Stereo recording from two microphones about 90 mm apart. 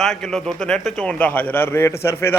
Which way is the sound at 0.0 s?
5° left (ahead or behind).